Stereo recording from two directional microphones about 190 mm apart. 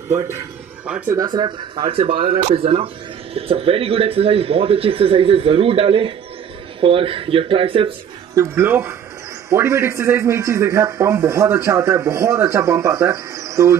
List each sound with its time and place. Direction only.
0.1 s speech: 15° right (ahead or behind)
1.1 s speech: 20° right (ahead or behind)
8.4 s a man's voice: 10° right (ahead or behind)